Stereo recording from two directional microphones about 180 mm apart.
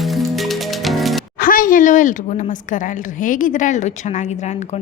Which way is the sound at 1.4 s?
50° left (ahead or behind).